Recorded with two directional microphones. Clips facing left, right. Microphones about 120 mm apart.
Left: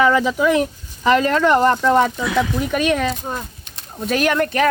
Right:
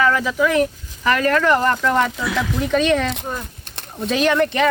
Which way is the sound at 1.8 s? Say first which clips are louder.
Left 3 dB; 10° left (ahead or behind).